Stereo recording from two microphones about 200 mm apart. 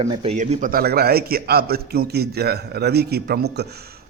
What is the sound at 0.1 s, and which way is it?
Speech, 25° right (ahead or behind).